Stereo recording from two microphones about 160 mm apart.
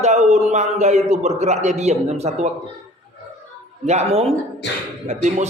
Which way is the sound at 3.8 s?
40° right (ahead or behind).